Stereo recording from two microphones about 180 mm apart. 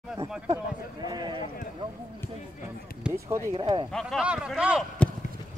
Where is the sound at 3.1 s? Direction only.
5° right (ahead or behind).